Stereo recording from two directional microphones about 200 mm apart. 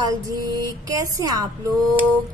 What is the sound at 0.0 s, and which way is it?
A woman's voice, 20° right (ahead or behind).